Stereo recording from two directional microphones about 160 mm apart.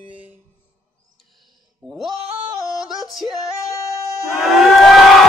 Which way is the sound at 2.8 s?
Centre (ahead or behind).